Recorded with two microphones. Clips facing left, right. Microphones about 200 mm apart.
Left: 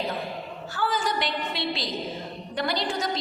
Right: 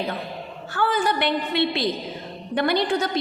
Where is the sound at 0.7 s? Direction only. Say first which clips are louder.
Right 5 dB; 60° right (ahead or behind).